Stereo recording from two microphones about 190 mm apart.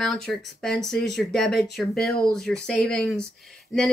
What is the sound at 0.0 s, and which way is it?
Speech, centre (ahead or behind).